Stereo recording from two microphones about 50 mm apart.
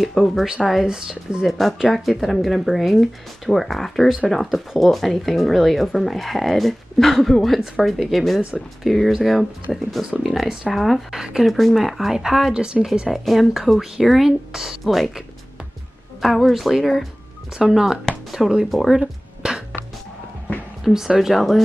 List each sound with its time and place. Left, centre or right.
0.0 s speech: centre
0.8 s speech: centre
1.4 s speech: centre
11.1 s speech: centre
11.5 s speech: centre
18.7 s speech: centre
18.9 s a sound: centre
20.8 s speech: centre